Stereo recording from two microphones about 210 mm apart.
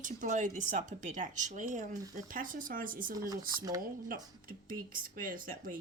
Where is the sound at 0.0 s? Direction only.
35° right (ahead or behind).